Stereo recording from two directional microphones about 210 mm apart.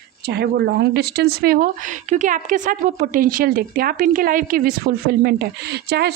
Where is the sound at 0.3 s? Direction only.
50° right (ahead or behind).